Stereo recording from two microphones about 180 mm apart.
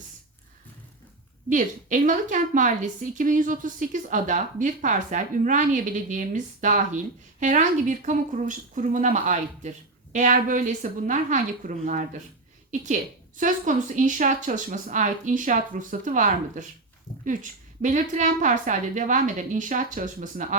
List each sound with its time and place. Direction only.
1.5 s a woman's voice: 45° right (ahead or behind)